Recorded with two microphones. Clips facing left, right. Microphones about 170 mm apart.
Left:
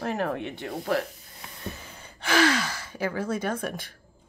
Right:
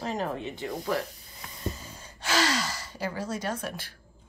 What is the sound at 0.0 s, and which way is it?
Speech, 60° left (ahead or behind).